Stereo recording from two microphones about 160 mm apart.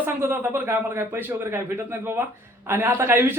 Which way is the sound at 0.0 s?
15° right (ahead or behind).